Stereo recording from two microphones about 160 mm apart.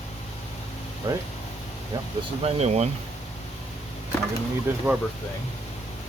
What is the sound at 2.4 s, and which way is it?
Speech, 45° right (ahead or behind).